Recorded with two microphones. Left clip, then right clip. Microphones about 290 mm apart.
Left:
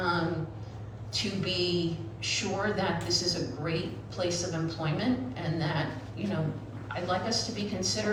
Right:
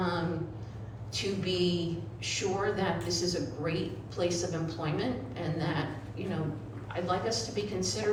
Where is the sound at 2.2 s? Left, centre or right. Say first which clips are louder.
Left 1 dB; right.